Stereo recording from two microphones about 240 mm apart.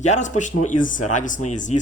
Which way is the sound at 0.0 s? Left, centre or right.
Left.